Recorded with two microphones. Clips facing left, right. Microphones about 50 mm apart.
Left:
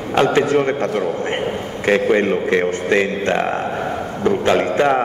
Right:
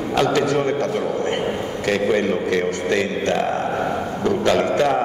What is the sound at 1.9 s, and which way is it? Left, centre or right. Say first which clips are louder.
A man's voice: left 4 dB; left.